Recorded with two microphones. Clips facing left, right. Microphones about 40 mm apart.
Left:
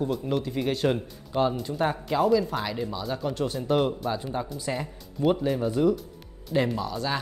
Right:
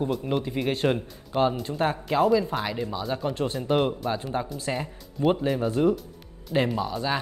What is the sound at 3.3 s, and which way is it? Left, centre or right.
Speech, right.